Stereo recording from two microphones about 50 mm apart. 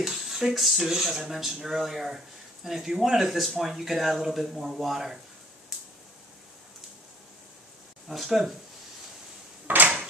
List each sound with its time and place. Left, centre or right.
0.0 s speech: centre
8.1 s speech: centre
9.7 s drawer open or close: right